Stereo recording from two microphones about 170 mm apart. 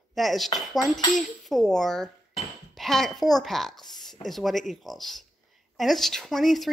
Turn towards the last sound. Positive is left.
turn(degrees=0)  # may be behind; listen again after turning